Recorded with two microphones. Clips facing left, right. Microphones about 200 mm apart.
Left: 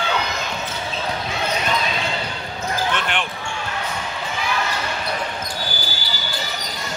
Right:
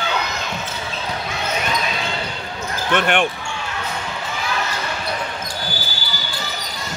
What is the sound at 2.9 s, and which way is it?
Speech, 55° right (ahead or behind).